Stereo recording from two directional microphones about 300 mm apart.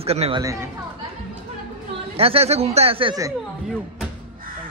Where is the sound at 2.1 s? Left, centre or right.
Centre.